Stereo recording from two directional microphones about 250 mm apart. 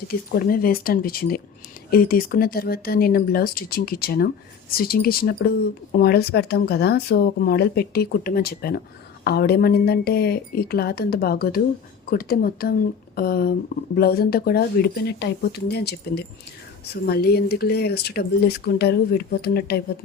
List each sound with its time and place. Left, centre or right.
0.1 s speech: left